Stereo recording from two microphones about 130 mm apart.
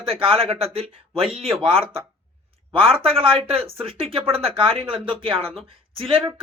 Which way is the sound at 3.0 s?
45° right (ahead or behind).